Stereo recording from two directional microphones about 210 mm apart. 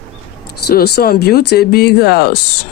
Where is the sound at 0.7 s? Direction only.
45° left (ahead or behind).